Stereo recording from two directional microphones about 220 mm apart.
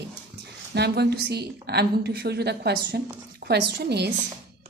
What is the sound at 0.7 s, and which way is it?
A woman's voice, 50° right (ahead or behind).